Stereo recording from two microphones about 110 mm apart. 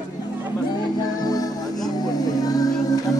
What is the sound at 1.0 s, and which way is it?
Music, 35° left (ahead or behind).